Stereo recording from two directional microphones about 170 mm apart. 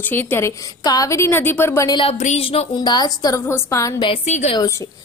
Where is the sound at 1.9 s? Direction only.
35° left (ahead or behind); by 4.0 s 20° left (ahead or behind).